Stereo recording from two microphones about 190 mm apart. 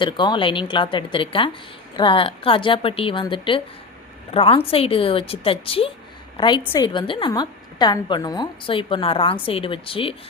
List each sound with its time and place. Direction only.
0.0 s a woman's voice: 25° left (ahead or behind)